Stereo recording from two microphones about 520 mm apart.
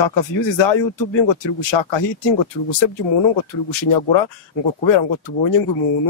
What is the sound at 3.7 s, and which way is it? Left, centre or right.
Speech, left.